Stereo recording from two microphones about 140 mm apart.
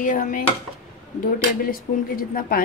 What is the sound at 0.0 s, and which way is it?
Speech, 70° left (ahead or behind).